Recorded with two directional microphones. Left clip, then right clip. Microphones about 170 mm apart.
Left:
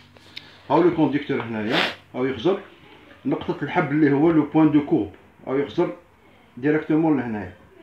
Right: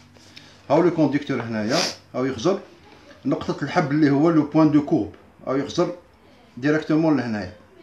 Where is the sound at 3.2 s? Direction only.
20° right (ahead or behind).